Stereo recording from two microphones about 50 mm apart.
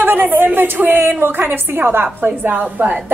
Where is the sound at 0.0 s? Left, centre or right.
Right.